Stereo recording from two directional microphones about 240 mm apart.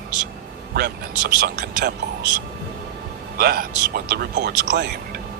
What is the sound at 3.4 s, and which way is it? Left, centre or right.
Speech, right.